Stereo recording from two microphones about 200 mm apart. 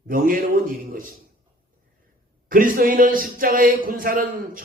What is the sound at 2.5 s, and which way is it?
Speech, 45° right (ahead or behind).